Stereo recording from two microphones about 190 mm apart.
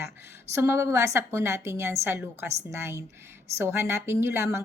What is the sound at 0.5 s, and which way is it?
A woman's voice, 15° right (ahead or behind).